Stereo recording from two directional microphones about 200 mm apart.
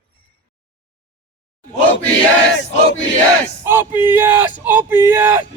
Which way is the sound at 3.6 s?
10° right (ahead or behind).